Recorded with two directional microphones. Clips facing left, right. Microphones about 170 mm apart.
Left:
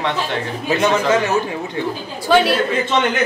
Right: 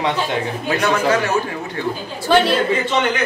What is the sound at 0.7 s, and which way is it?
A man's voice, 20° left (ahead or behind).